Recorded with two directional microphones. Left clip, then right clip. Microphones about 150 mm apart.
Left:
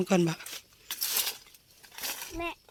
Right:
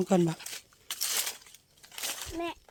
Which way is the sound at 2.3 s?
90° right.